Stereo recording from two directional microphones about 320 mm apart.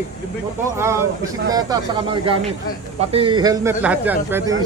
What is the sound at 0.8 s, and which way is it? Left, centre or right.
Speech, centre.